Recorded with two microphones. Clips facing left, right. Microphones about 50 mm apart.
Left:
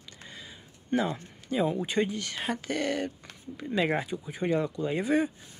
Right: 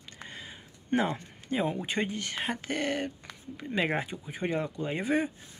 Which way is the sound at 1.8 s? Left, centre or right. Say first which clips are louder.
Left 3 dB; right.